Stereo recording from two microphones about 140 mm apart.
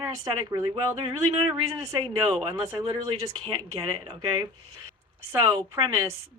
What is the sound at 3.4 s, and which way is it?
Speech, 35° right (ahead or behind).